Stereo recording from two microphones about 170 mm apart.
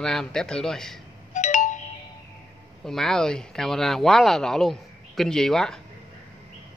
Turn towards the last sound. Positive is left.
turn(degrees=5)  # may be behind; listen again after turning